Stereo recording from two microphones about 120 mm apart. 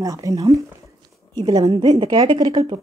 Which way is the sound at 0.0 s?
30° right (ahead or behind).